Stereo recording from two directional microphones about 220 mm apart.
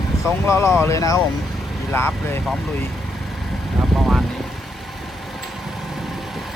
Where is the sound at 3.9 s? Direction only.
Centre (ahead or behind).